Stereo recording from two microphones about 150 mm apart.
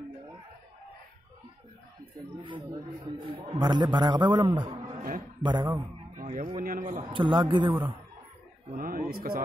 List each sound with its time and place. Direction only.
2.4 s a man's voice: 35° right (ahead or behind)
6.2 s speech: 55° right (ahead or behind)
7.1 s a man's voice: 30° right (ahead or behind)
8.7 s a sound: 65° right (ahead or behind); by 9.4 s 85° right